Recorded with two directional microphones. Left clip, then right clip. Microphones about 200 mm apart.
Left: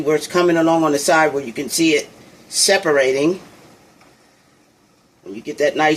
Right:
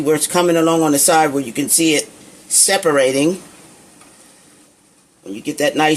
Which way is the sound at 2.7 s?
50° right (ahead or behind).